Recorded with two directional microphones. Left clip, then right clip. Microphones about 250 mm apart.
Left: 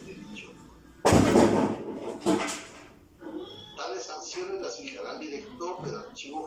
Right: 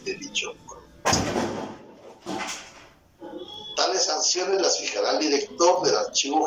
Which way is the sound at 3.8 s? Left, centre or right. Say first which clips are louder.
Right 13 dB; right.